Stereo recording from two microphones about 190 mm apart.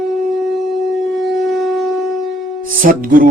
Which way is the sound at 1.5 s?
Centre (ahead or behind).